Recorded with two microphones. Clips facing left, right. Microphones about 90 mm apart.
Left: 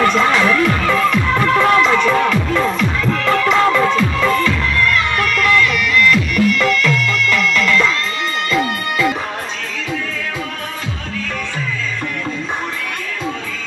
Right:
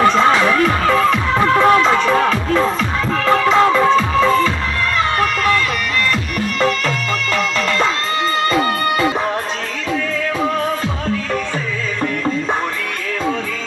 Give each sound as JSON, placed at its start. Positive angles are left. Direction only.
{"t": 0.0, "sound": "music", "side_deg": -25}